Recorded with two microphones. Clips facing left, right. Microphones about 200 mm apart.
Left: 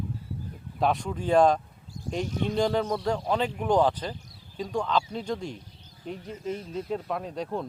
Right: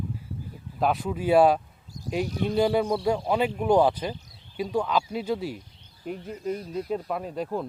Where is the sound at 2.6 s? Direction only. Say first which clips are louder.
Right 3 dB; 10° right (ahead or behind).